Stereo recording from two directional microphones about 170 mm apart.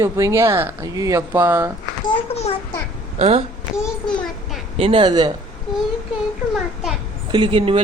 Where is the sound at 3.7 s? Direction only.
Centre (ahead or behind).